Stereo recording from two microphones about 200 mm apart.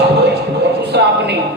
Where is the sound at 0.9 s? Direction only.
55° right (ahead or behind).